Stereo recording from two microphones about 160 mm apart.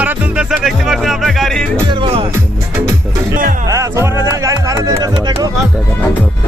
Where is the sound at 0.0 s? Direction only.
10° right (ahead or behind).